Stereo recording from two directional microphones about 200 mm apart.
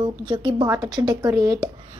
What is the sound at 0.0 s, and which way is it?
A woman's voice, 25° right (ahead or behind).